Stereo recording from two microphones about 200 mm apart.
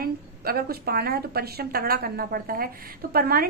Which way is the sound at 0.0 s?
50° right (ahead or behind).